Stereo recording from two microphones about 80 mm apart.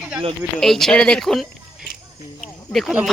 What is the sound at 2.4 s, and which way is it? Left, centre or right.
Snake, centre.